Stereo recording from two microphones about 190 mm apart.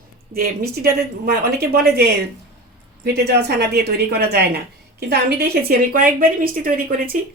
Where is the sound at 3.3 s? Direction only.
60° right (ahead or behind).